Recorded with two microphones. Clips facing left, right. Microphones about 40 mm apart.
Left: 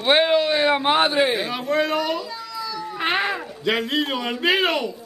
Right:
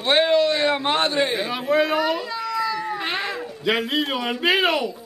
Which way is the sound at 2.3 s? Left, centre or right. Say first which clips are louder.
Right 7 dB; right.